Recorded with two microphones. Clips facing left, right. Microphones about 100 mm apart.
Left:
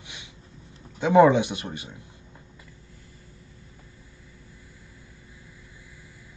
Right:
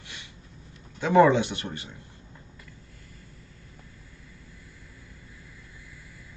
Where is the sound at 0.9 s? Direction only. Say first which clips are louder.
Left 2 dB; 15° left (ahead or behind).